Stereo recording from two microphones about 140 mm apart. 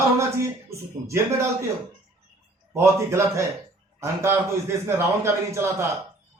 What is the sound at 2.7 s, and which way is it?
A man's voice, 20° right (ahead or behind).